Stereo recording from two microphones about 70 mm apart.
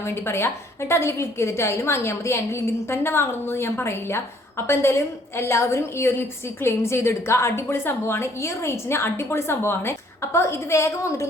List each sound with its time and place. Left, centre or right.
0.0 s a woman's voice: left